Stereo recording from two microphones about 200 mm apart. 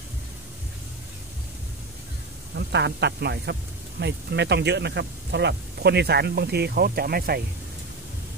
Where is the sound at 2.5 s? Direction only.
60° right (ahead or behind).